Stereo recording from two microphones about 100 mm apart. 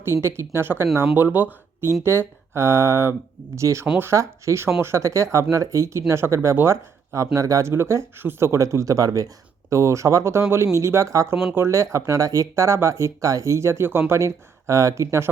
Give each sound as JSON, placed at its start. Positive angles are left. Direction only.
{"t": 0.0, "sound": "speech", "side_deg": -25}